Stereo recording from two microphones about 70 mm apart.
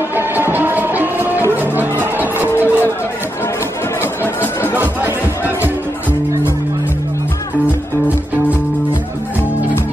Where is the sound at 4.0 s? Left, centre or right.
Left.